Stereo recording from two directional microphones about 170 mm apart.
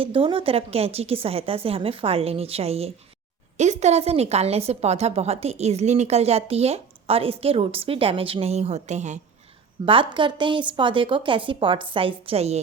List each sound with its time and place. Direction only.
0.0 s a woman's voice: 30° right (ahead or behind)
9.8 s a woman's voice: 30° right (ahead or behind)